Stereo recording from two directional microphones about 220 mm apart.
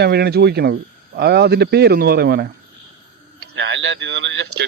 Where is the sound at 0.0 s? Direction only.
45° right (ahead or behind).